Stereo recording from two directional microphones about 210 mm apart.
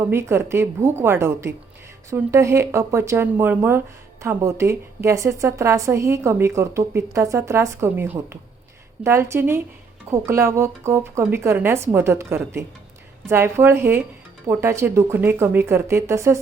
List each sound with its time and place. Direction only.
0.1 s speech: 10° right (ahead or behind)